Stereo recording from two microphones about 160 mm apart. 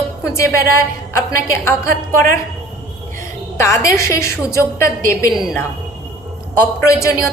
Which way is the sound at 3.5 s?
15° left (ahead or behind).